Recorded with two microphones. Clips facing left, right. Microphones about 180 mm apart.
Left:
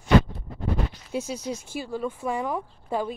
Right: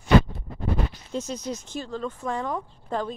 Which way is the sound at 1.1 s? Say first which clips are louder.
Left 1 dB; 10° left (ahead or behind).